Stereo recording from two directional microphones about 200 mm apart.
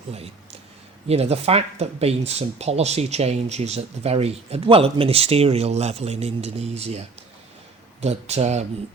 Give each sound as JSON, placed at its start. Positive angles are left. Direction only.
{"t": 1.0, "sound": "speech", "side_deg": -30}
{"t": 8.0, "sound": "speech", "side_deg": -30}